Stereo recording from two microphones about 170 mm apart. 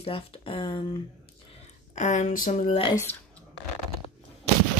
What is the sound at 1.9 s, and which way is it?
Speech, 45° left (ahead or behind).